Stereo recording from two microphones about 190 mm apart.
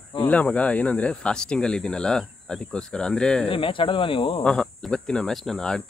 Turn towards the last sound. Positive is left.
turn(degrees=5)  # may be behind; listen again after turning